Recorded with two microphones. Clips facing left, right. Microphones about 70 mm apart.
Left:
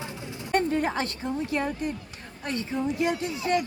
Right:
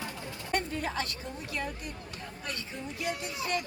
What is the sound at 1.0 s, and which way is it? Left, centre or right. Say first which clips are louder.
A woman's voice: left 10 dB; left.